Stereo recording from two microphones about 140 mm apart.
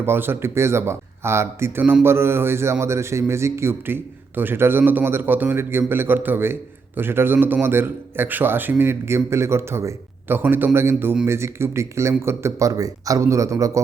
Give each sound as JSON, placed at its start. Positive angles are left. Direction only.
{"t": 0.0, "sound": "speech", "side_deg": -15}